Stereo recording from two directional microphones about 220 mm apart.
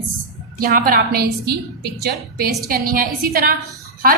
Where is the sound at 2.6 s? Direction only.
40° right (ahead or behind).